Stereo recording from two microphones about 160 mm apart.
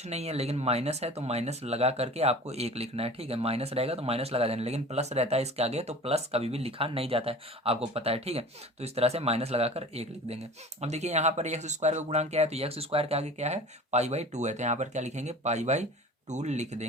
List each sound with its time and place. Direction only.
0.0 s speech: 40° right (ahead or behind)